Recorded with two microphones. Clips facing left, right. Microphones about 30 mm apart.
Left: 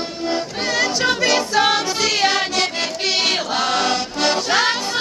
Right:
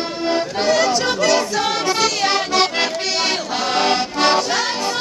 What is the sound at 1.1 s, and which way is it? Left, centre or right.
A capella, centre.